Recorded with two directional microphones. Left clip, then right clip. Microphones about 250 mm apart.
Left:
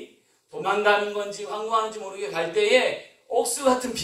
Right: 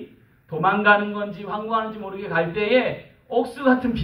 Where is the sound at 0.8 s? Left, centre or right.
Left.